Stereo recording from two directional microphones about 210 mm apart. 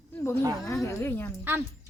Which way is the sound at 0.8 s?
10° left (ahead or behind).